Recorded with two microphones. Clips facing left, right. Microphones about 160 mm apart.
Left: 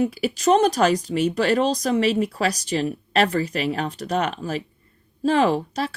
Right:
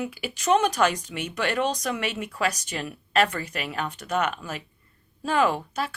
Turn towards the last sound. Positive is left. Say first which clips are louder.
# left 4 dB
turn(degrees=35)  # may be behind; listen again after turning